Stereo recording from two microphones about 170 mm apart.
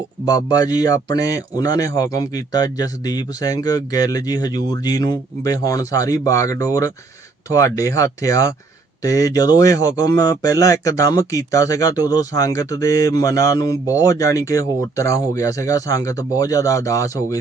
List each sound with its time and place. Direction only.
0.3 s a man's voice: 20° left (ahead or behind)